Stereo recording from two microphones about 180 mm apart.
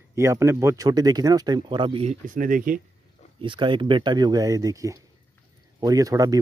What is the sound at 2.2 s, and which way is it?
Speech, 50° right (ahead or behind).